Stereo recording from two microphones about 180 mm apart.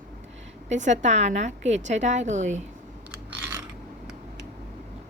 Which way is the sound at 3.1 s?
10° right (ahead or behind).